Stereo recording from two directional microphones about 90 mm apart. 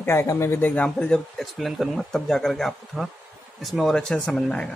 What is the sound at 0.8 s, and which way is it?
Speech, 10° left (ahead or behind).